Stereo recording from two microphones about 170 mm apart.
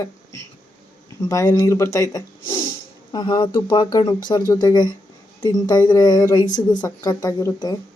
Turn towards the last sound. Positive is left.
turn(degrees=20)  # may be behind; listen again after turning